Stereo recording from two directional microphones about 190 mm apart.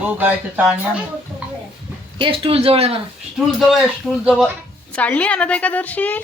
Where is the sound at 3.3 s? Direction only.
Centre (ahead or behind).